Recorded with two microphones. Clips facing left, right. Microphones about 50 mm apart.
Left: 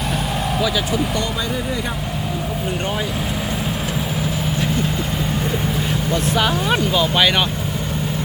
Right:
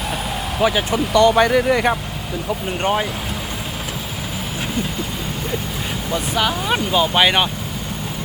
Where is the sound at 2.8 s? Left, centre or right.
Right.